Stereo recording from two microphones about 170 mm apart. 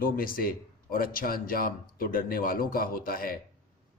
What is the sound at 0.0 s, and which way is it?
A man's voice, 55° left (ahead or behind).